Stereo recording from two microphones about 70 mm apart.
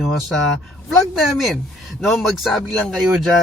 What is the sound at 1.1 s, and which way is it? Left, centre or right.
Speech, centre.